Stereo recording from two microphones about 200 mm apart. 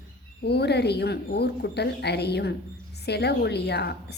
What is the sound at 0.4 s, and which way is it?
Speech, 55° left (ahead or behind).